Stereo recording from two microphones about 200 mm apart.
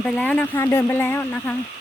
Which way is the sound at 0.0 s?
5° left (ahead or behind).